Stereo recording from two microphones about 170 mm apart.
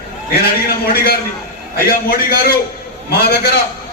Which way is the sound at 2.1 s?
65° left (ahead or behind).